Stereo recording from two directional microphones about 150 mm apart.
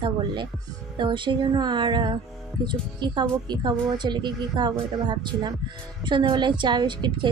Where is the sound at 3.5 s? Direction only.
30° right (ahead or behind).